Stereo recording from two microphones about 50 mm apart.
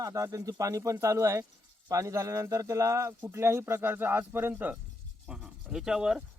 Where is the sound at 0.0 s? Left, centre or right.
Right.